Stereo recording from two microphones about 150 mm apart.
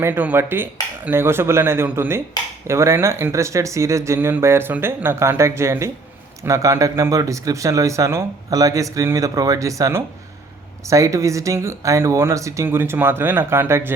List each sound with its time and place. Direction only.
0.0 s speech: 15° right (ahead or behind)